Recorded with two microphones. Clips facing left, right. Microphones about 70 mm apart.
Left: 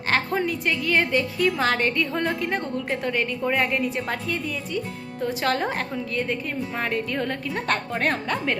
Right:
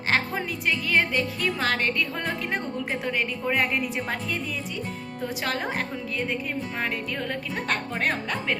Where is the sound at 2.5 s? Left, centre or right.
Centre.